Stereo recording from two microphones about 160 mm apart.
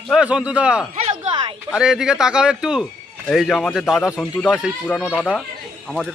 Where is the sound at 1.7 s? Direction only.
5° right (ahead or behind).